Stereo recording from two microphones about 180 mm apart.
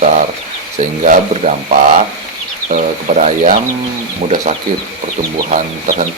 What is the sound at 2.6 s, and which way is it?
Speech, 40° right (ahead or behind).